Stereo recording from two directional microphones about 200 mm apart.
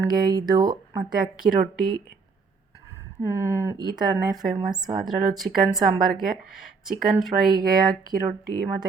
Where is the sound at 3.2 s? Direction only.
15° right (ahead or behind).